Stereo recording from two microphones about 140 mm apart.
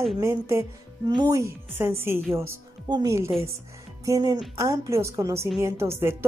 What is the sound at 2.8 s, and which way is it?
A woman's voice, 30° right (ahead or behind).